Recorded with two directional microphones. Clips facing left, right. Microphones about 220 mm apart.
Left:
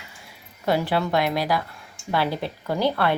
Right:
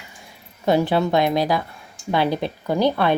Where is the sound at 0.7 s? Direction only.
20° right (ahead or behind).